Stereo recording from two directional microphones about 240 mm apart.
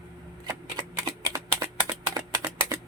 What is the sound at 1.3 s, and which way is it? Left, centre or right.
Typing, centre.